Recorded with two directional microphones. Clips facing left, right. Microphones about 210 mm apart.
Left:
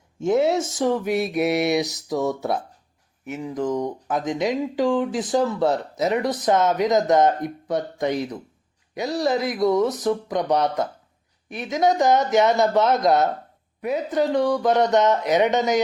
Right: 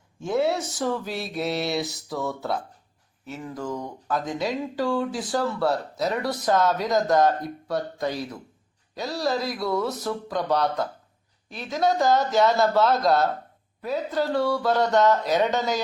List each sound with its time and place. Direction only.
0.2 s speech: 20° left (ahead or behind)